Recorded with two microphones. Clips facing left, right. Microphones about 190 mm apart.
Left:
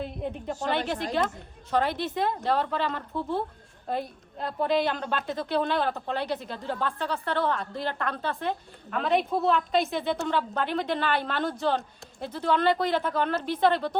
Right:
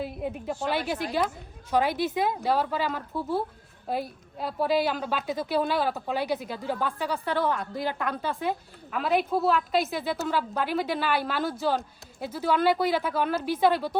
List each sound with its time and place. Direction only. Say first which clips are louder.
0.0 s a woman's voice: right 1 dB; 5° right (ahead or behind)